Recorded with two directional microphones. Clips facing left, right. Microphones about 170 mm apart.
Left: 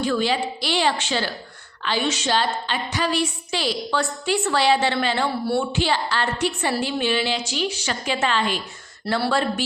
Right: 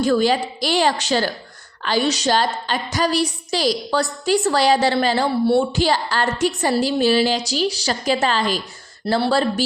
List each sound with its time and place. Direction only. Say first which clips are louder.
0.0 s a woman's voice: right 5 dB; 40° right (ahead or behind)